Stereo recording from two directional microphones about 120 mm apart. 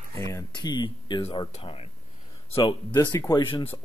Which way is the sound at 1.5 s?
55° left (ahead or behind).